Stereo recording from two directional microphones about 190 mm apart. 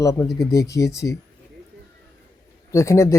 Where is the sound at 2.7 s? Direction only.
15° left (ahead or behind).